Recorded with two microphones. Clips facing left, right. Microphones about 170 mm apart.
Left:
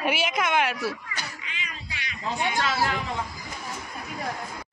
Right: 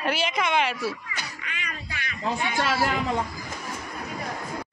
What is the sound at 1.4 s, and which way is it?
Music, 55° right (ahead or behind).